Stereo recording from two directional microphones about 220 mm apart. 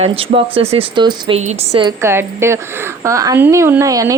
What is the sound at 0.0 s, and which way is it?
Speech, 25° right (ahead or behind).